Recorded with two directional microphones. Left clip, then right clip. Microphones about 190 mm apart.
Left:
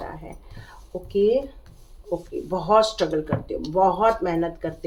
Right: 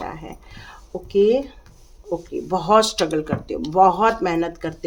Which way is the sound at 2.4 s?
55° right (ahead or behind).